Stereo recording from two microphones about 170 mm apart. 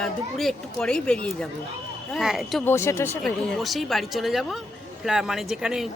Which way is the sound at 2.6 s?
15° left (ahead or behind).